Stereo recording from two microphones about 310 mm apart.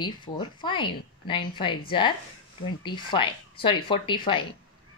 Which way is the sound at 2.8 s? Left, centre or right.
Centre.